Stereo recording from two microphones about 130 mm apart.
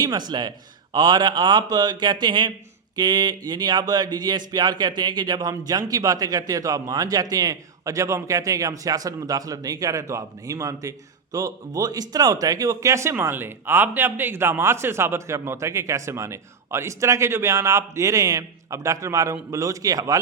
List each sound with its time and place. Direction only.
0.0 s speech: 35° right (ahead or behind)